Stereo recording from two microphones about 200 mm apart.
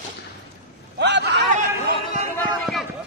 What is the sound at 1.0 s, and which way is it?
Speech, 60° right (ahead or behind).